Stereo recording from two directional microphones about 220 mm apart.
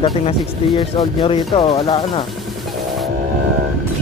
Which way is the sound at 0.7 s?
20° left (ahead or behind).